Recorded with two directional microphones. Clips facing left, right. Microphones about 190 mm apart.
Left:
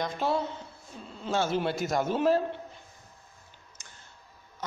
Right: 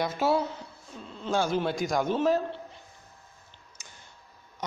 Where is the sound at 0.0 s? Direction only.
5° right (ahead or behind).